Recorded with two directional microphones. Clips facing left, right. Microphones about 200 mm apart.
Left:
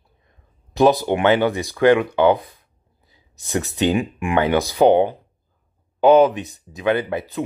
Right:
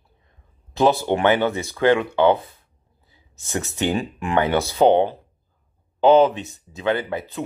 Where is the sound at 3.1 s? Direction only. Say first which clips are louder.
Left 4 dB; 15° left (ahead or behind).